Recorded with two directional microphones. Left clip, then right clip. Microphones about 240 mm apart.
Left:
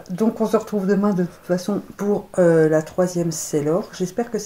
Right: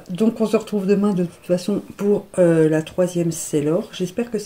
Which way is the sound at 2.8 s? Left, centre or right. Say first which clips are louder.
Right 1 dB; right.